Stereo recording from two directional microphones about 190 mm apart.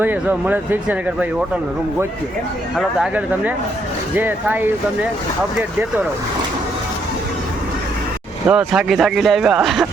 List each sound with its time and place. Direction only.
0.0 s speech: 10° right (ahead or behind)
2.7 s speech: 5° right (ahead or behind)
8.4 s speech: 5° right (ahead or behind)